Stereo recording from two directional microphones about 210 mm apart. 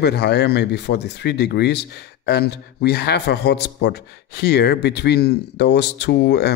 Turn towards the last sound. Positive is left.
turn(degrees=50)  # may be behind; listen again after turning